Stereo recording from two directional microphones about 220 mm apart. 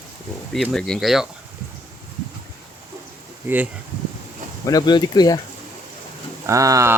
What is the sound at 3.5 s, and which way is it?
Speech, 10° right (ahead or behind).